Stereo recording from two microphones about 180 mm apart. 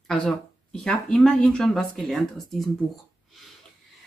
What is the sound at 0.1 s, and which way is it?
Speech, 5° left (ahead or behind).